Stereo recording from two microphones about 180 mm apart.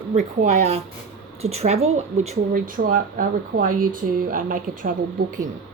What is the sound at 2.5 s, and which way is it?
Speech, 50° right (ahead or behind).